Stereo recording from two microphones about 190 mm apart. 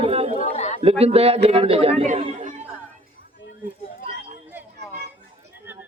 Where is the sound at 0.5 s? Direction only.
35° left (ahead or behind).